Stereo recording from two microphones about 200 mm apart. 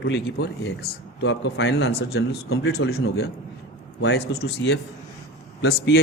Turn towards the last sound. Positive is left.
turn(degrees=55)  # may be behind; listen again after turning